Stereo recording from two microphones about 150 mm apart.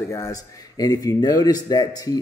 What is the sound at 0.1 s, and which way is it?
A man's voice, 20° left (ahead or behind).